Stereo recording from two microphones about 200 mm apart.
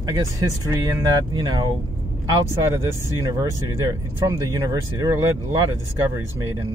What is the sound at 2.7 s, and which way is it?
Speech, 15° right (ahead or behind).